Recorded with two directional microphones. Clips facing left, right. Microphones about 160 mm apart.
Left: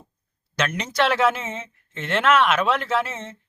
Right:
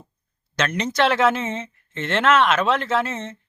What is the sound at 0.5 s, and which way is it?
Speech, 5° left (ahead or behind).